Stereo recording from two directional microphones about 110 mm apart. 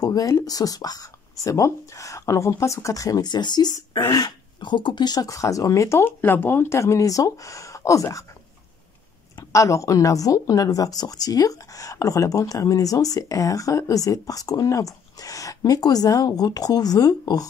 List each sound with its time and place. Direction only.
0.0 s speech: 35° left (ahead or behind)
9.5 s speech: 30° left (ahead or behind)